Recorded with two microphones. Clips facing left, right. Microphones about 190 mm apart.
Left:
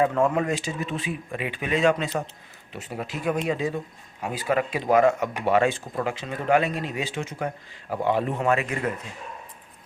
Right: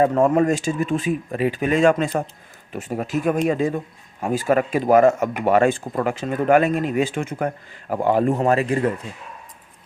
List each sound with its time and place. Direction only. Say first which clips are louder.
0.0 s speech: right 5 dB; 40° right (ahead or behind)